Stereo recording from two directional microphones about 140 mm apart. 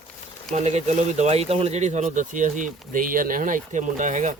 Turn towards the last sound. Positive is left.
turn(degrees=-60)  # may be behind; listen again after turning